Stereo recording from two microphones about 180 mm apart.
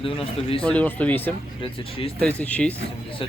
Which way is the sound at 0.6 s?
5° left (ahead or behind).